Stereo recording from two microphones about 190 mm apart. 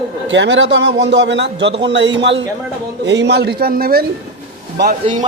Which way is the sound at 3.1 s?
65° right (ahead or behind).